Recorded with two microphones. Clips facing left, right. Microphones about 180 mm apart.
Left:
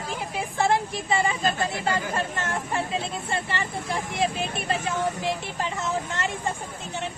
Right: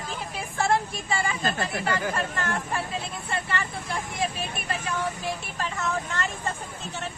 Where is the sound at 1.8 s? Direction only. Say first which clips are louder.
Even; 25° left (ahead or behind).